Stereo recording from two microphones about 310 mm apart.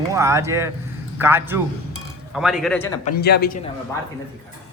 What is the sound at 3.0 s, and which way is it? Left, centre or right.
Speech, left.